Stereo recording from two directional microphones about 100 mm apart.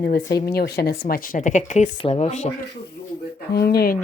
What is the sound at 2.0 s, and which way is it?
Speech, 80° left.